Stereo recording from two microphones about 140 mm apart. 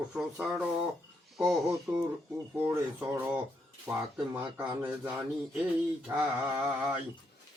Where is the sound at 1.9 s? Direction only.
20° right (ahead or behind).